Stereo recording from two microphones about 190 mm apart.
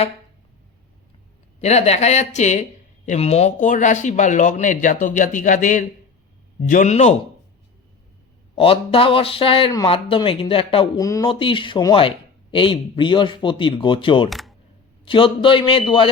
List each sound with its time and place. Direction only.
1.6 s speech: 35° left (ahead or behind)
8.5 s speech: 30° left (ahead or behind)
11.3 s speech: 25° left (ahead or behind)
14.3 s speech: centre (ahead or behind)
15.0 s speech: 25° left (ahead or behind)